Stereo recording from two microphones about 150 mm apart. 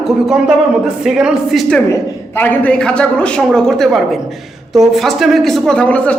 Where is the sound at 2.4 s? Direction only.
10° left (ahead or behind).